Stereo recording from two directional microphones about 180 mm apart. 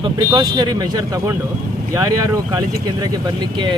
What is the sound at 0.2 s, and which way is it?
Speech, 20° right (ahead or behind).